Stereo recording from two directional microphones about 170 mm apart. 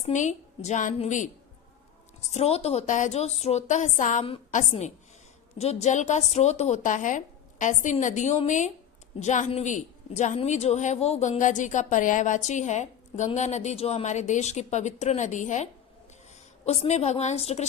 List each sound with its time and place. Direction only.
0.0 s a woman's voice: 45° left (ahead or behind)
2.3 s a woman's voice: 35° left (ahead or behind)
5.5 s a woman's voice: 40° left (ahead or behind)